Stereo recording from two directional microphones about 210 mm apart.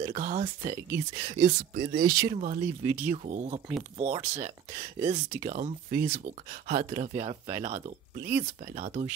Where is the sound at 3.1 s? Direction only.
35° right (ahead or behind).